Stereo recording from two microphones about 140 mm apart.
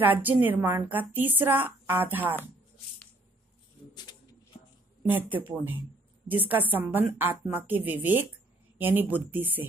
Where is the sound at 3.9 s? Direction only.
30° left (ahead or behind).